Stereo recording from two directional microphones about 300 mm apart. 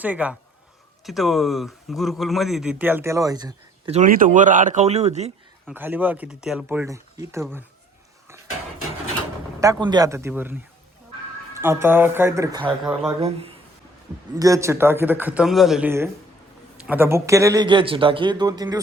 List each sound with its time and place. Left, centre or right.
0.0 s speech: centre; by 5.3 s right
5.6 s speech: centre
9.8 s speech: centre
12.8 s speech: centre
13.1 s speech: centre